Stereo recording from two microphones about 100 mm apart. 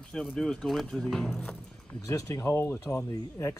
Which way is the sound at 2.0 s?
35° left (ahead or behind).